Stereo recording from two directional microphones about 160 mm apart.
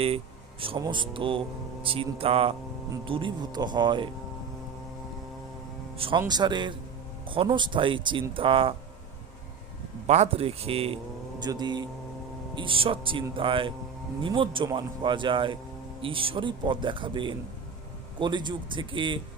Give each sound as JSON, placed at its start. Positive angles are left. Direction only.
{"t": 0.8, "sound": "speech", "side_deg": -30}
{"t": 6.0, "sound": "speech", "side_deg": -30}
{"t": 10.1, "sound": "speech", "side_deg": -40}